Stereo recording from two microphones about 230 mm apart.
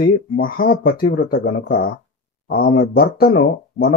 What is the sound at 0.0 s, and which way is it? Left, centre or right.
Speech, left.